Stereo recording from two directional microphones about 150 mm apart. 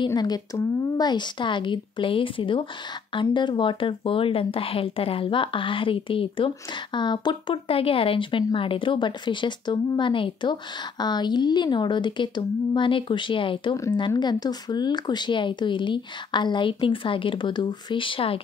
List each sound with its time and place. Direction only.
0.0 s speech: 25° left (ahead or behind)